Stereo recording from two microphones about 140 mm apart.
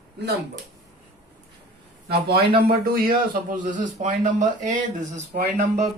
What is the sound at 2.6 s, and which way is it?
Speech, 90° right.